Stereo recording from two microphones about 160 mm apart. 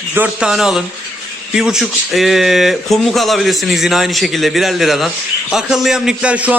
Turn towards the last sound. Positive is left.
turn(degrees=-5)  # may be behind; listen again after turning